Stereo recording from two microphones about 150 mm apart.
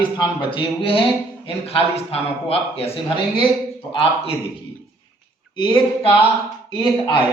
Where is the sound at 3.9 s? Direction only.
40° left (ahead or behind).